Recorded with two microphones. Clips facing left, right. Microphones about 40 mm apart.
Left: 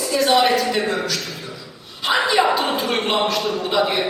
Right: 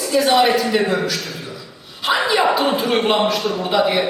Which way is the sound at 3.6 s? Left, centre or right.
Centre.